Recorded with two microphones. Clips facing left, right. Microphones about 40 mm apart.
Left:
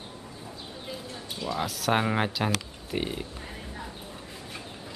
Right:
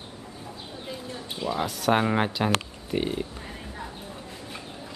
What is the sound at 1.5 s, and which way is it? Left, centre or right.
Speech, centre.